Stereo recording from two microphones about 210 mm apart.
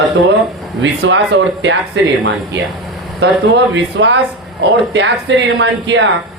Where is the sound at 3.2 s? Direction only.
55° right (ahead or behind).